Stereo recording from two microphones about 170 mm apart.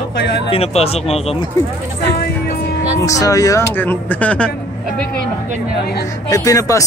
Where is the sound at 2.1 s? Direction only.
60° left (ahead or behind).